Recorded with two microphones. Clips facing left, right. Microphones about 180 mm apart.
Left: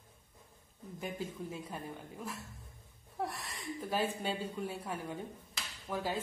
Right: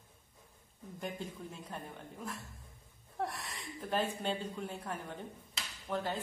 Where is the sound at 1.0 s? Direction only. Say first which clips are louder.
Left 2 dB; 5° left (ahead or behind).